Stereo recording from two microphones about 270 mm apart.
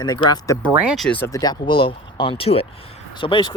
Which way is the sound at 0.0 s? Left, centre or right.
Centre.